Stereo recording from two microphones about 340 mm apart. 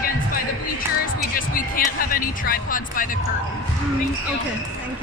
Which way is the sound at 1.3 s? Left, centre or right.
Left.